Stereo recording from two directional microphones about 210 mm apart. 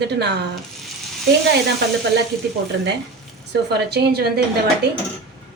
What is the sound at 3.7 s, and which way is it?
Speech, 50° right (ahead or behind).